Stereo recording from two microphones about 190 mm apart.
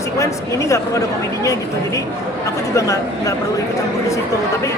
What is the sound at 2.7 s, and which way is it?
Speech, 15° left (ahead or behind).